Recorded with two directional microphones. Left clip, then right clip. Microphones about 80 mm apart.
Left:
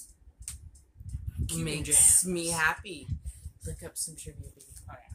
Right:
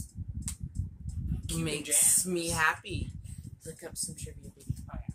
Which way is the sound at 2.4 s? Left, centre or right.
Right.